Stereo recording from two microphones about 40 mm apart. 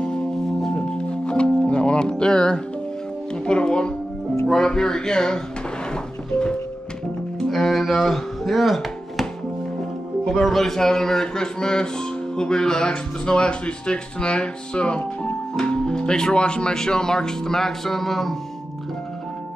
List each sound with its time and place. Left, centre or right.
0.6 s music: centre
3.4 s speech: left
7.3 s music: centre
7.7 s a sound: centre
8.5 s speech: centre
10.4 s speech: centre